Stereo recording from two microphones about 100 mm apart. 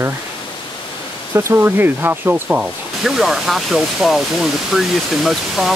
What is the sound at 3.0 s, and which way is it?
Speech, 5° right (ahead or behind).